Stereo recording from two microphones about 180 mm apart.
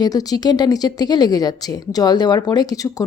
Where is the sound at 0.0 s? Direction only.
20° left (ahead or behind).